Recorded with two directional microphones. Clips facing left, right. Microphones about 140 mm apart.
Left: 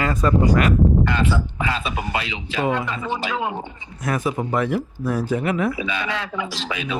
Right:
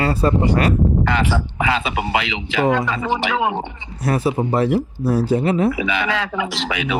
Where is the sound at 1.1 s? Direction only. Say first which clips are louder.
Right 2 dB; 90° right.